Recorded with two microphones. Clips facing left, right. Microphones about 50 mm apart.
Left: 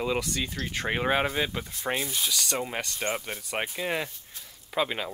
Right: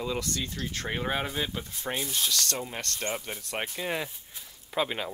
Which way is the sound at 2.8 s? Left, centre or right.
Centre.